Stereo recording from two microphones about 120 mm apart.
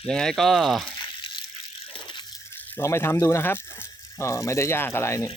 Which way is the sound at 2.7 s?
20° left (ahead or behind).